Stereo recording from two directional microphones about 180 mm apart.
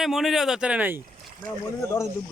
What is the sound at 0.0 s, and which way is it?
Speech, centre (ahead or behind).